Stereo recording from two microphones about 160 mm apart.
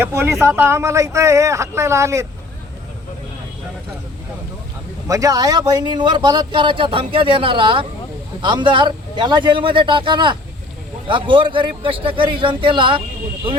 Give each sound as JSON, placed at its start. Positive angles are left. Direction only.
{"t": 0.0, "sound": "speech", "side_deg": -15}
{"t": 5.0, "sound": "a man's voice", "side_deg": -20}